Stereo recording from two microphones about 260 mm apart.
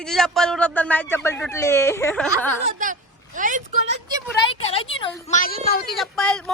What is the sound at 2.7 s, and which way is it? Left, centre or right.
Speech, right.